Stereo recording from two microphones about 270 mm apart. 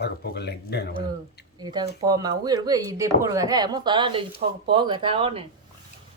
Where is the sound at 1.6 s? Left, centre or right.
Centre.